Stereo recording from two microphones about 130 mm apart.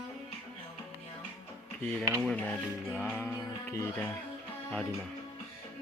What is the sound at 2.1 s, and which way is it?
Speech, 10° left (ahead or behind).